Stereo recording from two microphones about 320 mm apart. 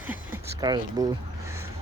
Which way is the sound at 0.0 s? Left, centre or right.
Centre.